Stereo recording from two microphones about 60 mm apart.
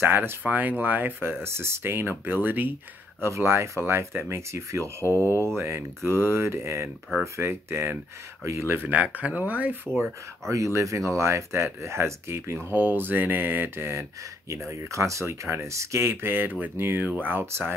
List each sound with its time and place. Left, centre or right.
0.0 s speech: right
1.4 s speech: right
3.2 s speech: right
5.0 s speech: left
5.6 s speech: right
8.8 s speech: right
9.9 s speech: right
14.5 s speech: right